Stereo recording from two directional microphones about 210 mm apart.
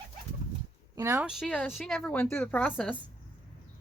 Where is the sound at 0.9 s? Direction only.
15° right (ahead or behind).